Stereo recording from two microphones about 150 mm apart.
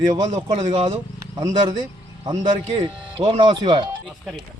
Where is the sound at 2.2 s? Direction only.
30° right (ahead or behind).